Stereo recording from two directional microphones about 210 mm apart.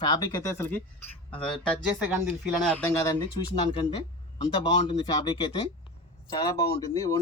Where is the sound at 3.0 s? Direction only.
15° left (ahead or behind).